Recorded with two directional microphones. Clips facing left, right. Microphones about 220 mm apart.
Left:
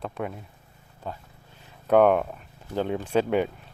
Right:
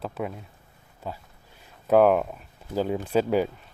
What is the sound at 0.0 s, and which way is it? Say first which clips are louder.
Speech: right 1 dB; centre (ahead or behind).